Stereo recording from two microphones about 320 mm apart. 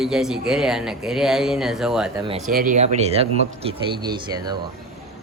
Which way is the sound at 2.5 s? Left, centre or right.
Right.